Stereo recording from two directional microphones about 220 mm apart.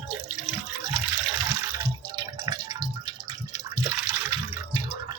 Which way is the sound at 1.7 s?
15° right (ahead or behind).